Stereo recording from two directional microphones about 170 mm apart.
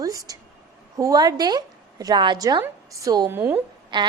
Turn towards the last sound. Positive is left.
turn(degrees=-25)  # may be behind; listen again after turning